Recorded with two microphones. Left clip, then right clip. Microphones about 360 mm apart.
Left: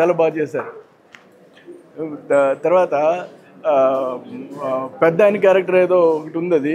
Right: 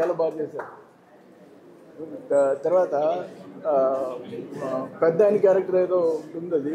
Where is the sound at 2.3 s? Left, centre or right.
Left.